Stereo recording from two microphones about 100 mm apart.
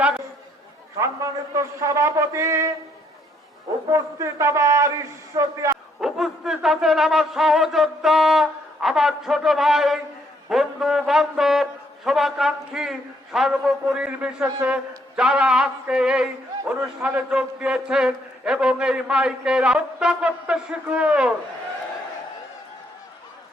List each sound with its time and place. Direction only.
0.9 s a man's voice: 35° right (ahead or behind)
3.9 s a man's voice: 30° right (ahead or behind)
6.0 s a man's voice: 5° right (ahead or behind)
14.7 s a sound: 10° right (ahead or behind)